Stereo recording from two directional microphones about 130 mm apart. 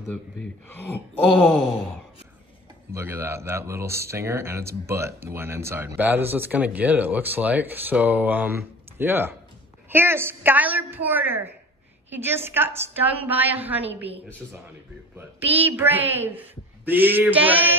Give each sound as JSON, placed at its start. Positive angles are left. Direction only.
{"t": 0.1, "sound": "speech", "side_deg": 15}
{"t": 2.9, "sound": "speech", "side_deg": -15}
{"t": 15.1, "sound": "speech", "side_deg": -15}